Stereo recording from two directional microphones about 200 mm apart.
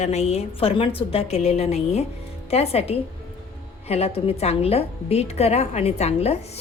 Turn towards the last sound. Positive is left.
turn(degrees=30)  # may be behind; listen again after turning